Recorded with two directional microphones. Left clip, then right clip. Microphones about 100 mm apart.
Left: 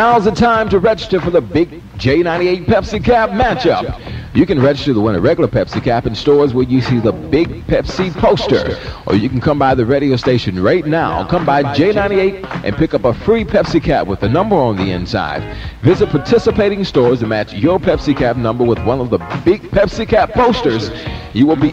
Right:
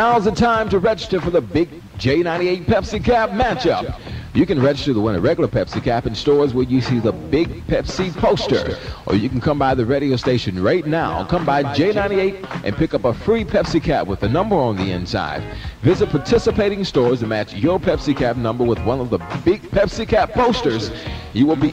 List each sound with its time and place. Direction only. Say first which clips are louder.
0.0 s speech: left 5 dB; 15° right (ahead or behind); by 21.6 s 30° right (ahead or behind)